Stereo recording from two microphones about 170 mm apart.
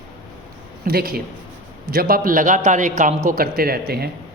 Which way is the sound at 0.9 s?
65° right (ahead or behind).